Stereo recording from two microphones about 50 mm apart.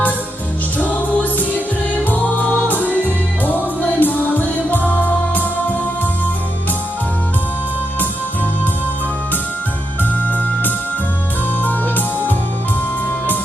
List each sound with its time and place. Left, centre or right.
0.8 s music: left
10.0 s music: left